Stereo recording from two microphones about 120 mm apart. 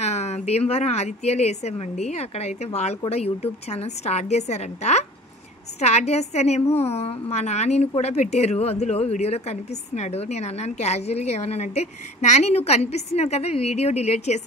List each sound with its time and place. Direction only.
0.0 s a woman's voice: 65° left (ahead or behind)